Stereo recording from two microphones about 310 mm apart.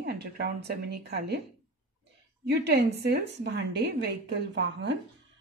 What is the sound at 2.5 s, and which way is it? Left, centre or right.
Speech, right.